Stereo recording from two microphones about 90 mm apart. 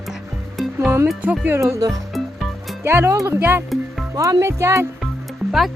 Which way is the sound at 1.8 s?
45° right (ahead or behind).